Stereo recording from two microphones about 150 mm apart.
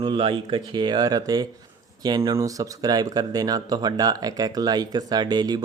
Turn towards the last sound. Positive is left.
turn(degrees=-30)  # may be behind; listen again after turning